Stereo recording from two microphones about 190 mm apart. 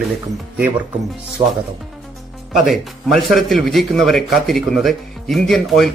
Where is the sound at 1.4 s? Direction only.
30° right (ahead or behind).